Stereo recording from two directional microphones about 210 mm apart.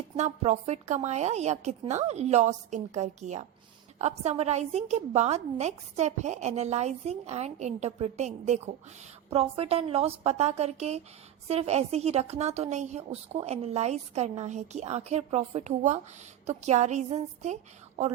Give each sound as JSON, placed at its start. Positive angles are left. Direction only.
{"t": 0.2, "sound": "a woman's voice", "side_deg": -35}